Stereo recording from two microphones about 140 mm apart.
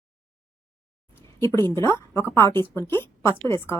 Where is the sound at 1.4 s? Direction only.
20° left (ahead or behind).